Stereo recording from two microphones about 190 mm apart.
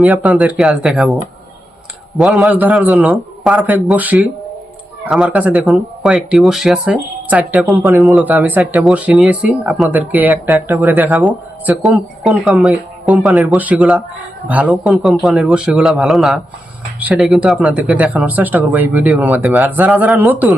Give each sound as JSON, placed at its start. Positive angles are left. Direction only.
{"t": 0.0, "sound": "speech", "side_deg": 0}
{"t": 2.1, "sound": "speech", "side_deg": 0}
{"t": 8.0, "sound": "speech", "side_deg": -5}